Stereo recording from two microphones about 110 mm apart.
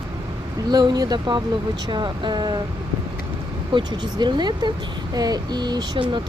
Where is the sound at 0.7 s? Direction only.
40° right (ahead or behind).